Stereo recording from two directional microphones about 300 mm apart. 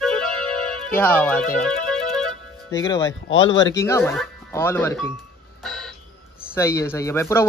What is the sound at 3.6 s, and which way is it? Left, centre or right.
Speech, centre.